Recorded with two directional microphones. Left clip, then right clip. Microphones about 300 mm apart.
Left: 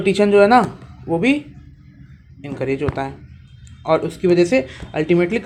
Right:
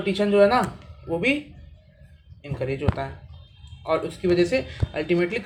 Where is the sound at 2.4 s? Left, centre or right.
Left.